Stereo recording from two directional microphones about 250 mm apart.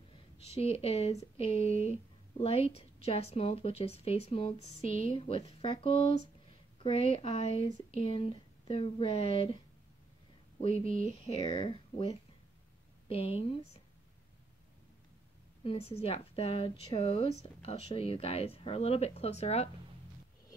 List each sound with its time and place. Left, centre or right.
0.4 s speech: left
11.2 s speech: left
15.6 s speech: left